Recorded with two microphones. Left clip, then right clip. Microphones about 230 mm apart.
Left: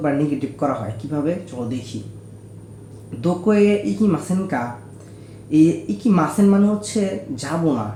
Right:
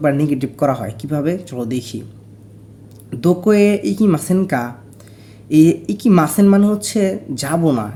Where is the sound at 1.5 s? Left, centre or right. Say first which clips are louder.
Right 4 dB; right.